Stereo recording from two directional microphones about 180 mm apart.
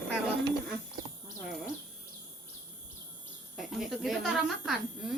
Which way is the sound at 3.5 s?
Centre (ahead or behind).